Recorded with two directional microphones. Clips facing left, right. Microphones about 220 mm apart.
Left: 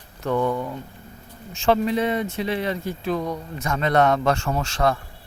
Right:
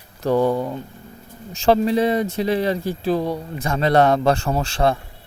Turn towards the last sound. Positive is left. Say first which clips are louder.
# right 3 dB
turn(degrees=-30)  # may be behind; listen again after turning